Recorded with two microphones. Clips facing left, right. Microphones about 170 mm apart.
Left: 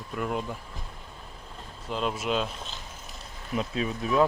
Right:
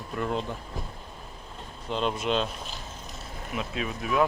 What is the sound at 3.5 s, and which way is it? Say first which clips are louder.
Speech: left 3 dB; 30° left (ahead or behind).